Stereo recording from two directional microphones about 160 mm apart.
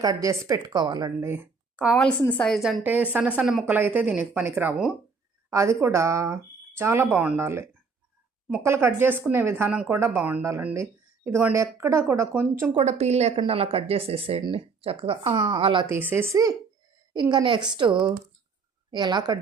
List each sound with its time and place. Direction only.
0.0 s a woman's voice: 20° right (ahead or behind)
1.3 s a woman's voice: 10° right (ahead or behind)
2.8 s speech: 10° right (ahead or behind)
3.7 s speech: 10° right (ahead or behind)
5.5 s speech: 20° right (ahead or behind)
8.6 s speech: 15° right (ahead or behind)
12.8 s speech: 45° right (ahead or behind)
15.9 s a woman's voice: 15° right (ahead or behind)